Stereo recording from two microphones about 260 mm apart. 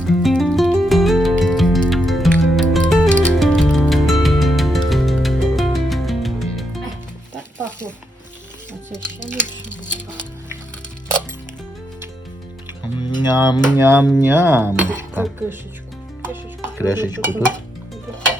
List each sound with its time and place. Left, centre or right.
0.0 s music: centre
8.9 s music: centre
13.0 s dishes: centre
13.7 s speech: centre
14.9 s dishes: centre
16.7 s dishes: centre
17.1 s dishes: centre